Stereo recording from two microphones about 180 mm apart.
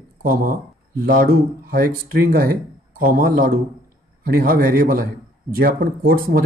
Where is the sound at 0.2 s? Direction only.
55° right (ahead or behind).